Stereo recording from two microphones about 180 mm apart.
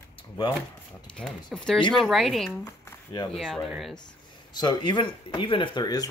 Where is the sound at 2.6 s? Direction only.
25° left (ahead or behind).